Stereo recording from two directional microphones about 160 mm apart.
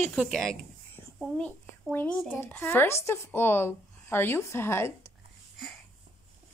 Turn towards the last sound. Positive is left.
turn(degrees=15)  # may be behind; listen again after turning